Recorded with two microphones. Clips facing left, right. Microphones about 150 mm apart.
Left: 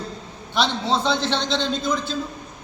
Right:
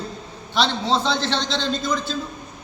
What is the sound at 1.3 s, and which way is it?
Speech, 15° left (ahead or behind).